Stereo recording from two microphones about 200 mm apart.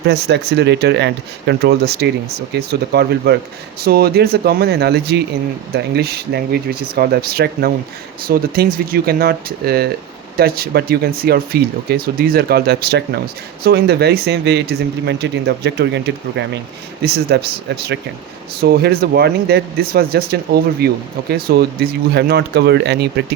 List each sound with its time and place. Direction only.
0.1 s speech: 55° right (ahead or behind)